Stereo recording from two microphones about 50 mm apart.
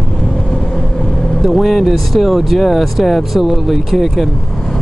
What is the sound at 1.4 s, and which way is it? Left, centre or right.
Speech, centre.